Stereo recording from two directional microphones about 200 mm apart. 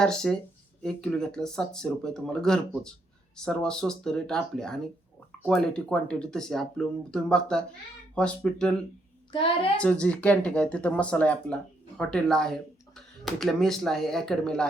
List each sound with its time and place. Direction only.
0.0 s speech: 5° left (ahead or behind)
9.3 s a child's voice: 25° left (ahead or behind)
9.8 s speech: 5° left (ahead or behind)